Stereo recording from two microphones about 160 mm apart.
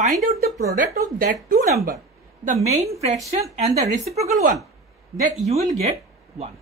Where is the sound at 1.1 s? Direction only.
60° right (ahead or behind).